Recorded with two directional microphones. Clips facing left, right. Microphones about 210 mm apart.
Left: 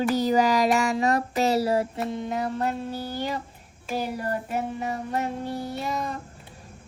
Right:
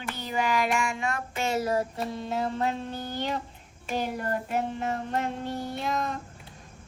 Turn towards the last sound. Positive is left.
turn(degrees=5)  # may be behind; listen again after turning